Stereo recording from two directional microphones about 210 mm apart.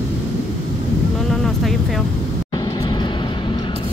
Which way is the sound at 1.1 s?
Centre (ahead or behind).